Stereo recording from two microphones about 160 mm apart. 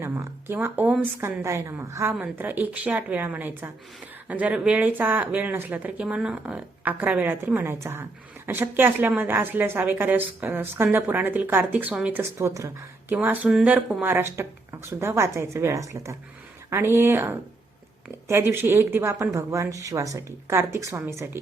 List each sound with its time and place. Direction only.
0.0 s a woman's voice: 15° right (ahead or behind)